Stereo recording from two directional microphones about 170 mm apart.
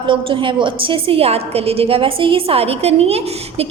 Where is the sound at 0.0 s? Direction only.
30° right (ahead or behind).